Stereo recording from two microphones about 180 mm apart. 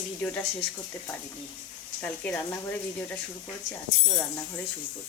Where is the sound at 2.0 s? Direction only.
10° left (ahead or behind).